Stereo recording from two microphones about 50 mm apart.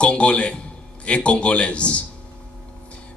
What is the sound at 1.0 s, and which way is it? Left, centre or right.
A man's voice, left.